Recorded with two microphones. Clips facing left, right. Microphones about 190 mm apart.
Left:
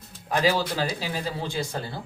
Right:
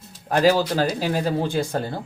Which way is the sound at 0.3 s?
45° right (ahead or behind).